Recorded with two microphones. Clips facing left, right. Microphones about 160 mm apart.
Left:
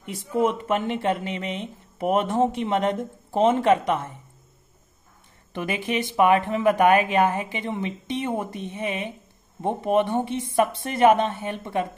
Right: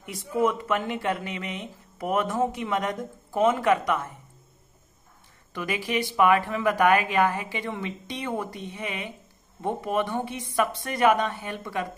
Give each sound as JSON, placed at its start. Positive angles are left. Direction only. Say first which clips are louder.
{"t": 0.3, "sound": "speech", "louder": "left 2 dB", "side_deg": 25}
{"t": 5.5, "sound": "speech", "louder": "left 2 dB", "side_deg": 25}